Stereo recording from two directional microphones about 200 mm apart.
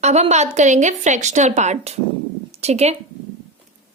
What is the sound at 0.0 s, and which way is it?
Speech, 35° right (ahead or behind).